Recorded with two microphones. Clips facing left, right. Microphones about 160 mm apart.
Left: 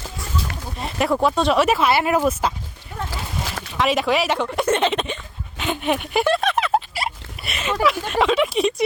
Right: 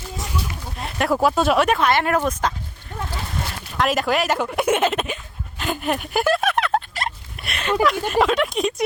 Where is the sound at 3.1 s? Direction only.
90° left.